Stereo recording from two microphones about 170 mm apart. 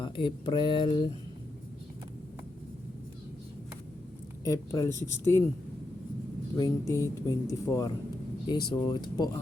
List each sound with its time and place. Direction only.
0.0 s speech: 30° left (ahead or behind)
4.4 s speech: 20° left (ahead or behind)
6.6 s speech: 20° left (ahead or behind)